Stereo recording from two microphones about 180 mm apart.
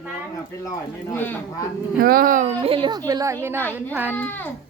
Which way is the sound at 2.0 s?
55° right (ahead or behind).